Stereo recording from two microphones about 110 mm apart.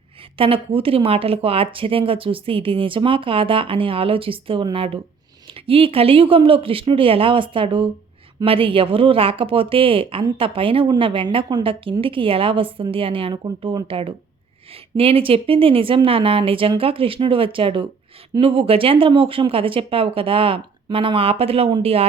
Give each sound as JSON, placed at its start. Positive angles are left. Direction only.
{"t": 0.3, "sound": "a woman's voice", "side_deg": -55}